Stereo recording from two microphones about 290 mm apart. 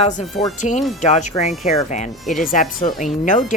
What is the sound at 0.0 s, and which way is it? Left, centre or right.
Speech, left.